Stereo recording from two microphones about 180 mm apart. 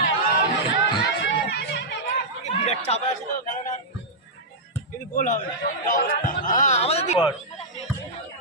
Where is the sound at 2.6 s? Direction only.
35° left (ahead or behind).